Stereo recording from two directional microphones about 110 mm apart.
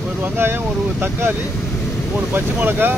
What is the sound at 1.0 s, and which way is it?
Speech, 20° right (ahead or behind).